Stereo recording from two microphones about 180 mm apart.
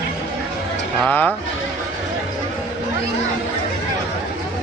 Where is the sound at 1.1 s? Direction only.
10° left (ahead or behind).